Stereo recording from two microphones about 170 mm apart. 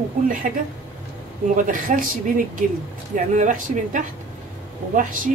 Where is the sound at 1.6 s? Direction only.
55° right (ahead or behind).